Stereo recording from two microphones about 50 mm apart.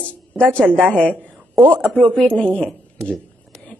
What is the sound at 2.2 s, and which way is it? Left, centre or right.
Speech, left.